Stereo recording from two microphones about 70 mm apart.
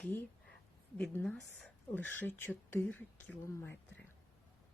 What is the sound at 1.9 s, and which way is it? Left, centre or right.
Speech, left.